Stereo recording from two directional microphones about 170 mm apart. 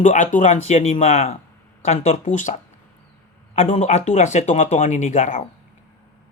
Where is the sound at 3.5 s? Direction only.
35° left (ahead or behind).